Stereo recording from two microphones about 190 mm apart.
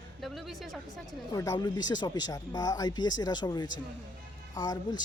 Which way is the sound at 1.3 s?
20° left (ahead or behind).